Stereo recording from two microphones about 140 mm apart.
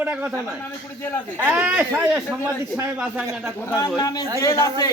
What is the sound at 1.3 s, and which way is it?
A man's voice, 10° right (ahead or behind).